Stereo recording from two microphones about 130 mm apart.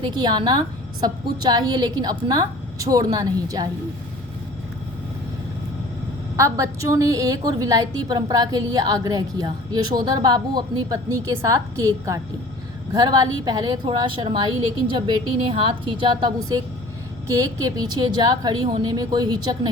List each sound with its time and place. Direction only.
0.0 s a woman's voice: 35° right (ahead or behind)
6.3 s a woman's voice: 25° right (ahead or behind); by 16.3 s 40° right (ahead or behind)
17.3 s a woman's voice: 30° right (ahead or behind)